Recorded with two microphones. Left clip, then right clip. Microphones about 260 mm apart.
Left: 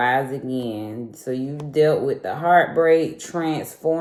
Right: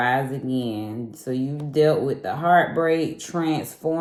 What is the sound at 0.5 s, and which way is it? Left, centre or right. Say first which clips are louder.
Speech: even; right.